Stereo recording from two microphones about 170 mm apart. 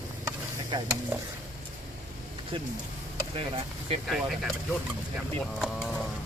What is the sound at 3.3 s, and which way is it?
Speech, 30° right (ahead or behind).